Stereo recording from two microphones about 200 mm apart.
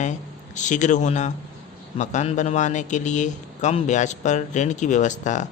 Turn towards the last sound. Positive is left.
turn(degrees=40)  # may be behind; listen again after turning